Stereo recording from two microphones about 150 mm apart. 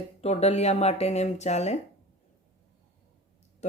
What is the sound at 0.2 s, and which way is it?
Speech, 45° left (ahead or behind).